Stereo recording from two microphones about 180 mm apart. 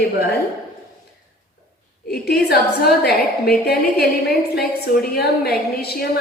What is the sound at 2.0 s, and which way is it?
Speech, 60° left (ahead or behind).